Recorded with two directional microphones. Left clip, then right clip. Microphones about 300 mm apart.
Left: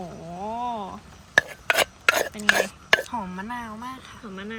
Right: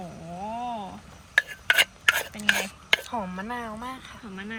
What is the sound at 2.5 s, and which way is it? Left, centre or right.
A woman's voice, centre.